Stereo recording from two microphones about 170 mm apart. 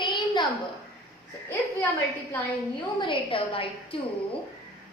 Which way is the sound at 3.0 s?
30° left (ahead or behind).